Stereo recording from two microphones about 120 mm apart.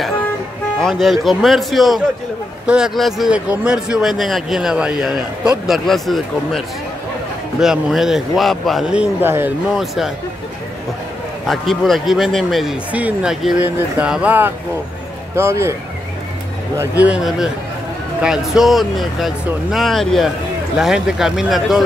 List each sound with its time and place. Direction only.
0.7 s speech: centre (ahead or behind)
7.6 s speech: 5° right (ahead or behind)
11.4 s speech: centre (ahead or behind)
13.6 s speech: 15° right (ahead or behind)
16.7 s speech: 15° right (ahead or behind)